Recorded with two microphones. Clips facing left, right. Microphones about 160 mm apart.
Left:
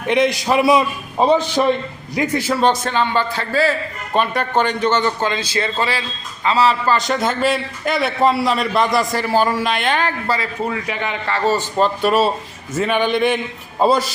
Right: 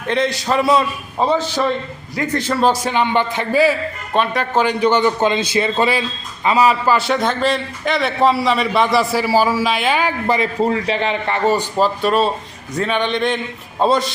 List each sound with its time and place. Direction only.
0.1 s a man's voice: 15° left (ahead or behind)
2.8 s a man's voice: 15° right (ahead or behind)
4.1 s a man's voice: centre (ahead or behind); by 10.5 s 20° right (ahead or behind)
10.6 s a man's voice: 30° right (ahead or behind)
11.8 s a man's voice: centre (ahead or behind)